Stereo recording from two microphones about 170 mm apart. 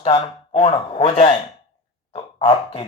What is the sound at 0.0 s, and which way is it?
Speech, 30° left (ahead or behind).